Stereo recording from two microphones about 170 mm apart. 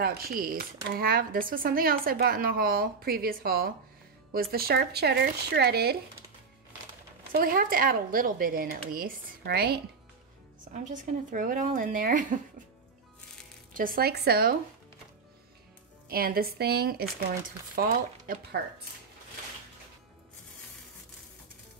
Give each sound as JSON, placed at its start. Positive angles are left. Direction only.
{"t": 0.0, "sound": "speech", "side_deg": -60}
{"t": 7.3, "sound": "speech", "side_deg": -60}
{"t": 10.7, "sound": "speech", "side_deg": -50}
{"t": 13.7, "sound": "speech", "side_deg": -60}
{"t": 16.1, "sound": "speech", "side_deg": -60}